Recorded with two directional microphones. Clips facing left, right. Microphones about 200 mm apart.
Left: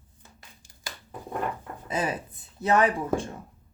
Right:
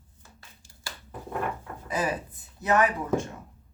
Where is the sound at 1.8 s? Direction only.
25° left (ahead or behind).